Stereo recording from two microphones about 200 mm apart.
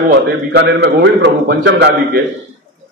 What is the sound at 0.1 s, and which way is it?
A man's voice, 55° right (ahead or behind).